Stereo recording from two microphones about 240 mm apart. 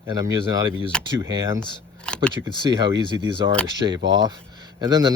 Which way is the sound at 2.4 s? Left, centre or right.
Centre.